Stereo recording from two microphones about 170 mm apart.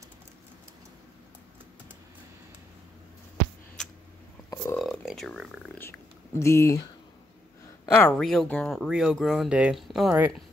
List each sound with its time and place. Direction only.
4.7 s a sound: centre (ahead or behind)
6.4 s speech: 15° left (ahead or behind)
7.9 s speech: 5° left (ahead or behind)